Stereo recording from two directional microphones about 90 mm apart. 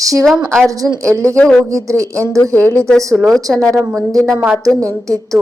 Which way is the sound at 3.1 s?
Centre (ahead or behind).